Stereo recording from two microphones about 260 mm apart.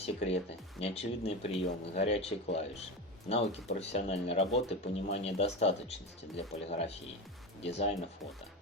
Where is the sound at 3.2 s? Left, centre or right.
Left.